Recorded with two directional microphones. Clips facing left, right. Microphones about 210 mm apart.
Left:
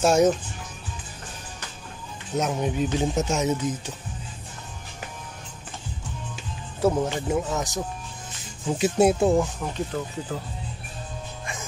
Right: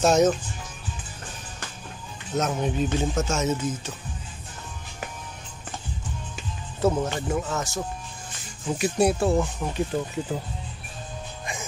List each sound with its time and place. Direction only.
0.0 s speech: 10° left (ahead or behind)
2.3 s speech: 10° left (ahead or behind)
6.8 s speech: 15° left (ahead or behind)
10.3 s speech: 15° right (ahead or behind)